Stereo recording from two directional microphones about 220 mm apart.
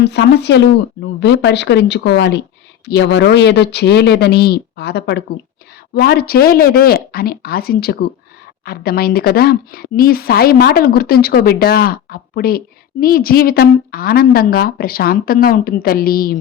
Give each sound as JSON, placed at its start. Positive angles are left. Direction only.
{"t": 0.0, "sound": "speech", "side_deg": 50}